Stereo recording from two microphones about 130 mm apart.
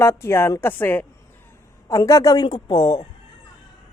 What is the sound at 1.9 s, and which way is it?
Speech, 25° left (ahead or behind).